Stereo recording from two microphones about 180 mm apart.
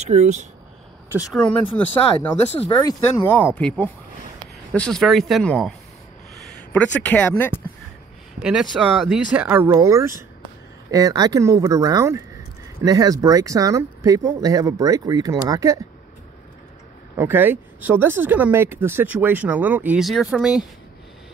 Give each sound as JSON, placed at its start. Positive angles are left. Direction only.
{"t": 0.0, "sound": "speech", "side_deg": -40}
{"t": 1.8, "sound": "speech", "side_deg": 10}
{"t": 2.6, "sound": "speech", "side_deg": 25}
{"t": 3.5, "sound": "speech", "side_deg": 5}
{"t": 8.4, "sound": "speech", "side_deg": -5}
{"t": 17.2, "sound": "speech", "side_deg": -10}